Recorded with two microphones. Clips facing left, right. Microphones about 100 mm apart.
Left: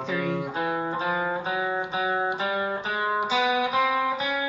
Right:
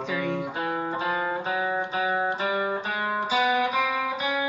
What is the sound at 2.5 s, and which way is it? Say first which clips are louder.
Music: right 1 dB; 15° right (ahead or behind).